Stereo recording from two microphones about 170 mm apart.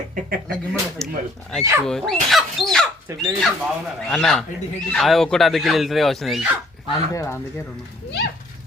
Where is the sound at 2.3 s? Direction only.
Centre (ahead or behind).